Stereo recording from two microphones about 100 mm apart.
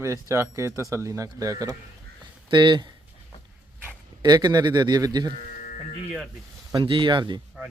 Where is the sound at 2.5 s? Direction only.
50° right (ahead or behind).